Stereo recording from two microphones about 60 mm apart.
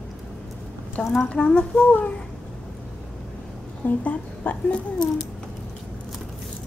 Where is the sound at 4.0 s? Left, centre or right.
Left.